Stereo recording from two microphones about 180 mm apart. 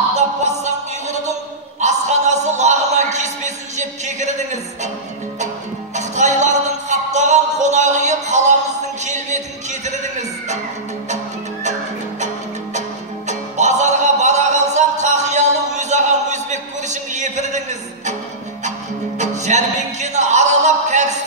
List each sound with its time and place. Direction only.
0.4 s music: 40° right (ahead or behind)
1.8 s a sound: 40° right (ahead or behind)
5.9 s music: 40° right (ahead or behind)
13.3 s music: 40° right (ahead or behind)
19.1 s music: 40° right (ahead or behind)